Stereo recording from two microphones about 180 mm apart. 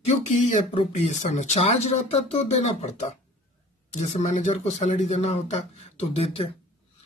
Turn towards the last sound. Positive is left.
turn(degrees=35)  # may be behind; listen again after turning